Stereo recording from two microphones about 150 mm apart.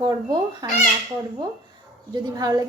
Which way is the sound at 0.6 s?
30° right (ahead or behind).